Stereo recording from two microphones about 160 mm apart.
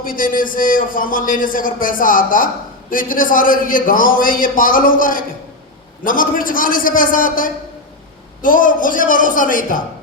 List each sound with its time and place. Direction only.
0.0 s a man's voice: 60° left (ahead or behind)